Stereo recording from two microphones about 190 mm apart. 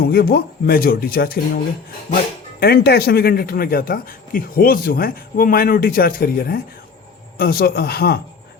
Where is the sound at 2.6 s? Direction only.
55° left (ahead or behind).